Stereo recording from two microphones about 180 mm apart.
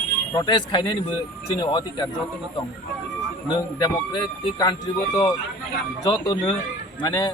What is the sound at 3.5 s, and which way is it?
A man's voice, 25° left (ahead or behind).